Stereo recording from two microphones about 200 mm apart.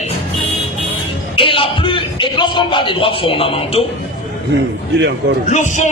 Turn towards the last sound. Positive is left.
turn(degrees=35)  # may be behind; listen again after turning